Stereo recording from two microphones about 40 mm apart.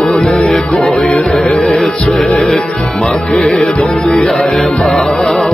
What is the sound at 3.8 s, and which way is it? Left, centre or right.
Music, centre.